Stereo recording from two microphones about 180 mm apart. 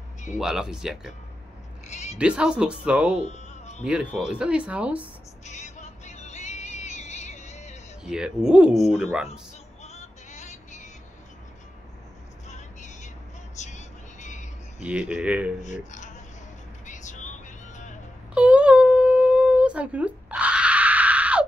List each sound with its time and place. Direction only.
0.4 s speech: 5° right (ahead or behind)
1.9 s a sound: 40° left (ahead or behind)
2.1 s speech: 5° right (ahead or behind)
3.3 s music: 40° left (ahead or behind)
3.8 s speech: 5° right (ahead or behind)
5.4 s music: 40° left (ahead or behind)
8.0 s speech: 5° right (ahead or behind)
9.8 s vehicle: 40° left (ahead or behind)
12.4 s vehicle: 40° left (ahead or behind)
14.8 s speech: 5° right (ahead or behind)
15.6 s speech: 40° left (ahead or behind)
16.8 s vehicle: 45° left (ahead or behind)
18.3 s a sound: 5° right (ahead or behind)